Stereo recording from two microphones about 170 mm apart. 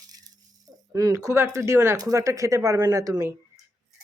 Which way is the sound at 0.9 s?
20° right (ahead or behind).